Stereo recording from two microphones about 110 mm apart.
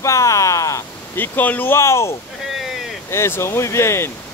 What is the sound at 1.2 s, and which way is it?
Speech, 15° left (ahead or behind).